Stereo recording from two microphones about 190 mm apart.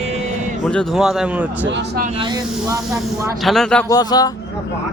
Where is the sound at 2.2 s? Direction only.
20° right (ahead or behind).